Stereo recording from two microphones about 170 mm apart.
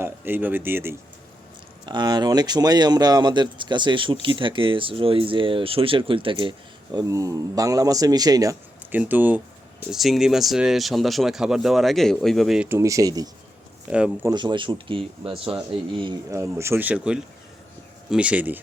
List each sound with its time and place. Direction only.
0.0 s speech: 10° right (ahead or behind)
1.8 s speech: 25° right (ahead or behind)
8.8 s speech: 10° right (ahead or behind)
12.6 s speech: 15° right (ahead or behind)
13.9 s speech: 5° right (ahead or behind)
14.3 s speech: 25° right (ahead or behind)
16.3 s speech: 15° right (ahead or behind)